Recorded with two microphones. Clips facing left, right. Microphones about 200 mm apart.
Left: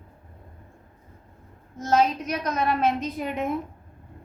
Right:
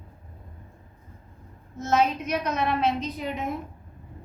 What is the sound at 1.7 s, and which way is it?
Speech, 35° left (ahead or behind).